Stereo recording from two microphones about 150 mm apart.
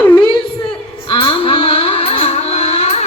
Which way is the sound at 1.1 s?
35° left (ahead or behind).